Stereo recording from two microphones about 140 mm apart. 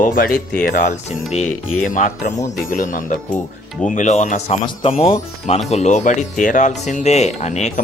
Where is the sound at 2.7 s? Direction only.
70° left (ahead or behind).